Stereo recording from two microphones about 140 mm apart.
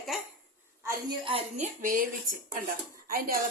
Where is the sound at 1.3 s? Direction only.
50° right (ahead or behind); by 2.4 s 75° right (ahead or behind).